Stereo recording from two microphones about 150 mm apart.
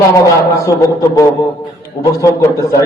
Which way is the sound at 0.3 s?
20° left (ahead or behind).